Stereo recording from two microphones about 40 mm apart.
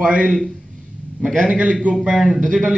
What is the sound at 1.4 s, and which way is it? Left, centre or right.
Speech, right.